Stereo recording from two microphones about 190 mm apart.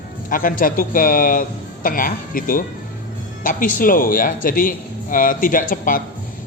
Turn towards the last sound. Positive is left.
turn(degrees=45)  # may be behind; listen again after turning